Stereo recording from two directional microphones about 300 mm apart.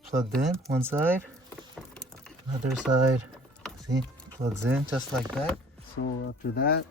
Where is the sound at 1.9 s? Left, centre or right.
Centre.